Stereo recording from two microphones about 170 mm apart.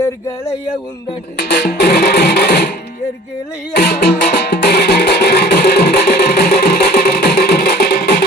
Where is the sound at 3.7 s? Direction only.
70° left (ahead or behind).